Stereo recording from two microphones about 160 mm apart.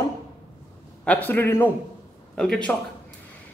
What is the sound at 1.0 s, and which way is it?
A man's voice, 10° left (ahead or behind).